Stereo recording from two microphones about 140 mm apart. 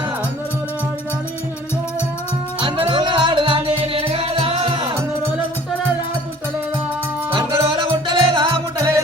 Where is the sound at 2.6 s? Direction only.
40° right (ahead or behind).